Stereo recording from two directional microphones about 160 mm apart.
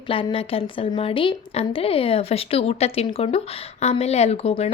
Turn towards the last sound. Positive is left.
turn(degrees=40)  # may be behind; listen again after turning